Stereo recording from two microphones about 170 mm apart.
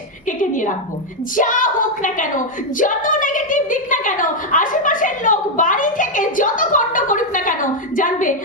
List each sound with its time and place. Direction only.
0.3 s a woman's voice: 50° left (ahead or behind)